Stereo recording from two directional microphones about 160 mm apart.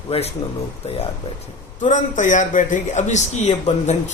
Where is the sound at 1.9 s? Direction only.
50° left (ahead or behind).